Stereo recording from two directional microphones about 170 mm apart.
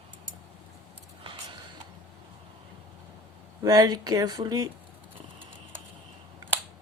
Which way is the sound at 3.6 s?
20° right (ahead or behind).